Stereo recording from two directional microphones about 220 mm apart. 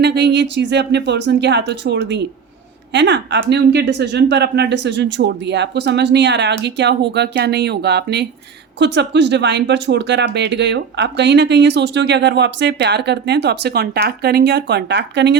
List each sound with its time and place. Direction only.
0.0 s speech: 50° right (ahead or behind)